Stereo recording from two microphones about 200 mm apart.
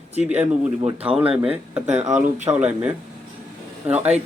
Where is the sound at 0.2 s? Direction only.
5° right (ahead or behind).